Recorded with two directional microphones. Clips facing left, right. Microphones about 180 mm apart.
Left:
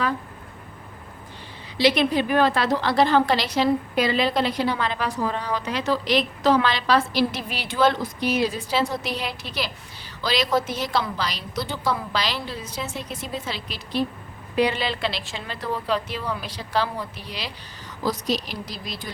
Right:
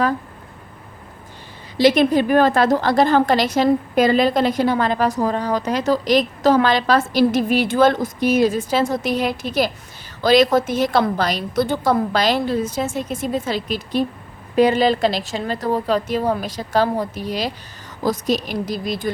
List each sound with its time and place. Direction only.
1.8 s a woman's voice: 45° right (ahead or behind)